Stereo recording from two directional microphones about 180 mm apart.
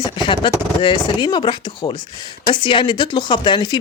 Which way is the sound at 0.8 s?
25° left (ahead or behind).